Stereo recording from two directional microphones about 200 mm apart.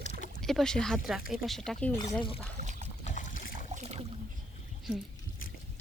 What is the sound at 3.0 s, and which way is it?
Boat, 40° left (ahead or behind).